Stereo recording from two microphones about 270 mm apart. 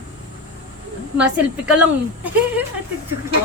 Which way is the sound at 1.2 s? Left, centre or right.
Centre.